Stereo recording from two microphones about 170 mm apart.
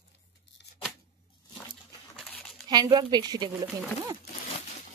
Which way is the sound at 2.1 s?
5° left (ahead or behind).